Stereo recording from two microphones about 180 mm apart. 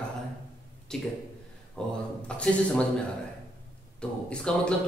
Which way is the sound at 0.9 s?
5° left (ahead or behind).